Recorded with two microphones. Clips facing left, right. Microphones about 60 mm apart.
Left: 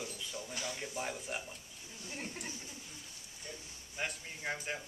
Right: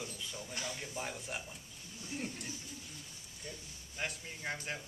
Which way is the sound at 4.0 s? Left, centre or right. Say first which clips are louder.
Left 1 dB; centre.